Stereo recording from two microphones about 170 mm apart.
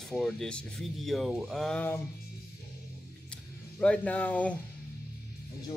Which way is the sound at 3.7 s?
10° left (ahead or behind).